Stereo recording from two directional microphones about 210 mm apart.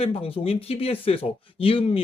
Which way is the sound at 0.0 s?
25° left (ahead or behind).